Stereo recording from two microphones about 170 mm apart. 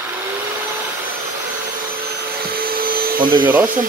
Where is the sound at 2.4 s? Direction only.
60° right (ahead or behind).